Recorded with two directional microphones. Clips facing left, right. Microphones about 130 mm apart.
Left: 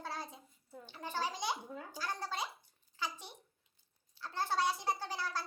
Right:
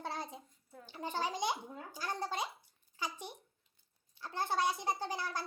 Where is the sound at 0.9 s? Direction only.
15° right (ahead or behind).